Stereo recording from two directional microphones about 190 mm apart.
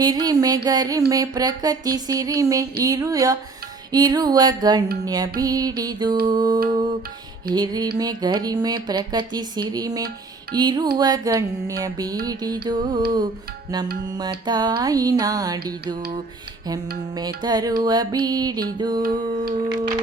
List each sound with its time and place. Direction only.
0.0 s speech: 20° right (ahead or behind)
17.2 s speech: 20° right (ahead or behind)
19.0 s a sound: 45° right (ahead or behind)
19.5 s speech: 25° right (ahead or behind)